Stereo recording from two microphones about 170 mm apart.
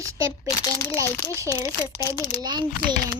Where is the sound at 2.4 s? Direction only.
25° right (ahead or behind).